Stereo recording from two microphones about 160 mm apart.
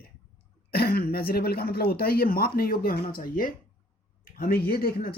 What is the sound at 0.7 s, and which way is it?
A man's voice, 75° left (ahead or behind).